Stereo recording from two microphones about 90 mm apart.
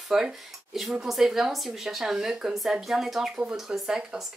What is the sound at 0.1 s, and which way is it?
Speech, 5° right (ahead or behind).